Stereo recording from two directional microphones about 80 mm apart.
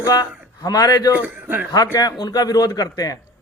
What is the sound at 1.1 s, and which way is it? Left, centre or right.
Speech, right.